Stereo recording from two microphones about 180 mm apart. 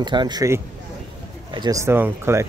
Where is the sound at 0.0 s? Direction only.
25° right (ahead or behind).